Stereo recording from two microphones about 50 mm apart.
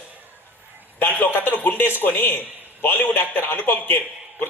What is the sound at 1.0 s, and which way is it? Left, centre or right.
A man's voice, left.